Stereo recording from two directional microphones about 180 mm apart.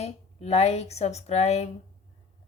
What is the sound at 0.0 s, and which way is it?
A woman's voice, 35° left (ahead or behind).